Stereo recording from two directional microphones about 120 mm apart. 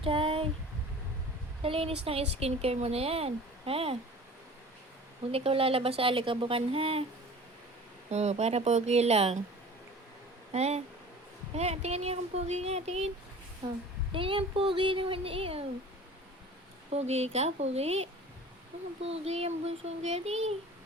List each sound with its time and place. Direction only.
0.0 s speech: 50° right (ahead or behind)
1.6 s speech: 50° right (ahead or behind)
5.3 s speech: 55° right (ahead or behind)
8.1 s speech: 65° right (ahead or behind)
10.5 s speech: 60° right (ahead or behind)
13.6 s a woman's voice: 30° right (ahead or behind)
14.1 s speech: 45° right (ahead or behind)
16.9 s speech: 65° right (ahead or behind)